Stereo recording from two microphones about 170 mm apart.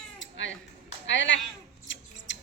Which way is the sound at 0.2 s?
90° left.